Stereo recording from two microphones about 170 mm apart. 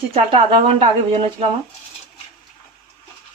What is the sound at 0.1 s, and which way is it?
Speech, 35° right (ahead or behind).